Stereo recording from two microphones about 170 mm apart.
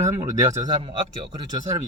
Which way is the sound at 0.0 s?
20° right (ahead or behind).